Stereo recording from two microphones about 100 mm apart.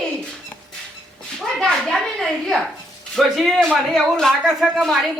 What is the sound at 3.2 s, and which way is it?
A man's voice, centre (ahead or behind).